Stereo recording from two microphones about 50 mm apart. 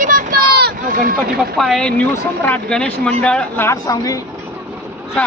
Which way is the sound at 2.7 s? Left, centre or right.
Centre.